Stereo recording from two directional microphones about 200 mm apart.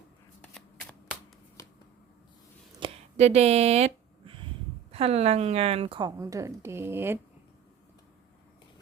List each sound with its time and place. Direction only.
0.5 s shuffling cards: centre (ahead or behind)
2.8 s a sound: 35° right (ahead or behind)
4.9 s a woman's voice: 30° right (ahead or behind); by 7.2 s 10° right (ahead or behind)